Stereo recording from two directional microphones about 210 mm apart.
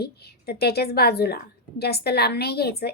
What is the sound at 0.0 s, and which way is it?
A woman's voice, 50° left (ahead or behind).